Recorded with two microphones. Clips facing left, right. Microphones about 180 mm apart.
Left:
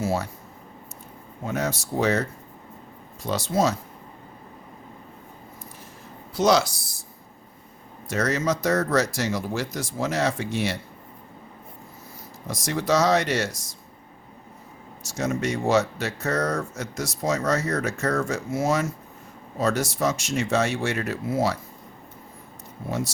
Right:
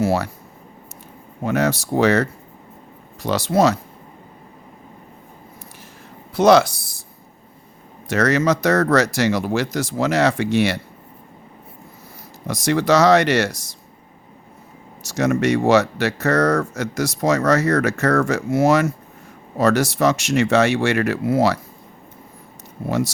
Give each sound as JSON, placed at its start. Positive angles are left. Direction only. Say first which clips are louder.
{"t": 0.0, "sound": "speech", "louder": "right 6 dB", "side_deg": -75}
{"t": 1.5, "sound": "speech", "louder": "right 8 dB", "side_deg": -75}
{"t": 3.2, "sound": "speech", "louder": "right 6 dB", "side_deg": -75}
{"t": 6.3, "sound": "speech", "louder": "right 7 dB", "side_deg": -60}
{"t": 8.0, "sound": "speech", "louder": "right 6 dB", "side_deg": -75}
{"t": 12.5, "sound": "speech", "louder": "right 7 dB", "side_deg": -80}
{"t": 15.0, "sound": "speech", "louder": "right 8 dB", "side_deg": -75}
{"t": 22.9, "sound": "speech", "louder": "right 7 dB", "side_deg": -75}